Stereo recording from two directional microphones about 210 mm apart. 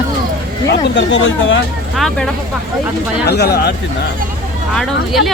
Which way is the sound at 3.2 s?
50° left (ahead or behind).